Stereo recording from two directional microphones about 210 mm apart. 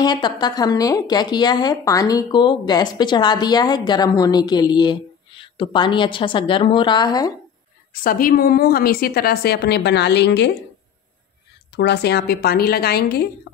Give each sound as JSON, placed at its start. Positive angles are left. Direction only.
{"t": 0.0, "sound": "a woman's voice", "side_deg": 20}
{"t": 7.9, "sound": "a woman's voice", "side_deg": 40}
{"t": 11.7, "sound": "a woman's voice", "side_deg": 55}